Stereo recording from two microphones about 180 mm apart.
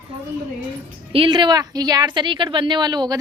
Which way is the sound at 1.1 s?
30° right (ahead or behind).